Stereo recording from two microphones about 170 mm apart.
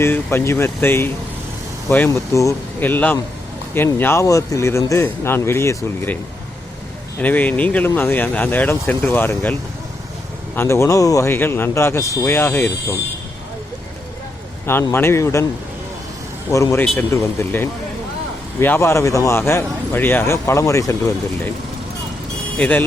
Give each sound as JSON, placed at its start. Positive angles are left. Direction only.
{"t": 0.0, "sound": "speech", "side_deg": 15}
{"t": 7.2, "sound": "speech", "side_deg": 10}
{"t": 14.7, "sound": "speech", "side_deg": 15}
{"t": 16.5, "sound": "a man's voice", "side_deg": 20}
{"t": 22.5, "sound": "speech", "side_deg": 10}